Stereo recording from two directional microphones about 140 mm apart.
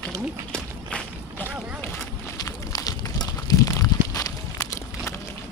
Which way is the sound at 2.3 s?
25° left (ahead or behind).